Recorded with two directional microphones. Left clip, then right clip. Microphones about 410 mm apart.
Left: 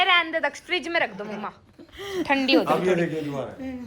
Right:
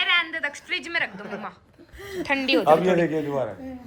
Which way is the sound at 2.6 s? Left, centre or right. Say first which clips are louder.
Right 4 dB; centre.